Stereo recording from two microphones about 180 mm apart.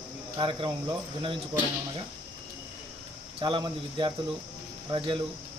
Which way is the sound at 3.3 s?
25° right (ahead or behind).